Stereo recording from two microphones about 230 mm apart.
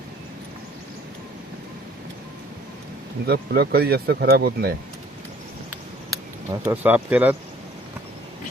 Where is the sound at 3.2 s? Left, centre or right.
Right.